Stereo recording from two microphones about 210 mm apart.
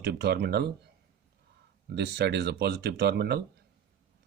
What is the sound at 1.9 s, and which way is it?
Speech, 55° right (ahead or behind).